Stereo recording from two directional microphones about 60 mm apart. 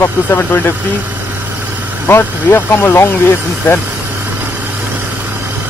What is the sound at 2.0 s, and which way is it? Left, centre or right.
Speech, left.